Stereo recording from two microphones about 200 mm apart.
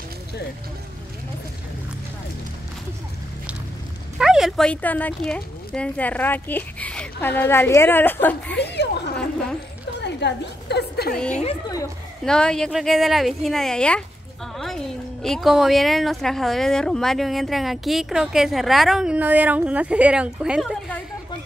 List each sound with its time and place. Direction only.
4.2 s speech: centre (ahead or behind)
8.5 s a woman's voice: 55° left (ahead or behind)
11.1 s speech: 5° left (ahead or behind)
15.2 s speech: centre (ahead or behind)